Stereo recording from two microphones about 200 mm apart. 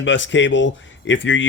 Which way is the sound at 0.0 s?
65° left (ahead or behind).